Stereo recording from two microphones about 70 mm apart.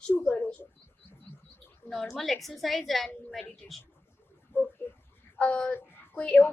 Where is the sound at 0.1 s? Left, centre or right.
Left.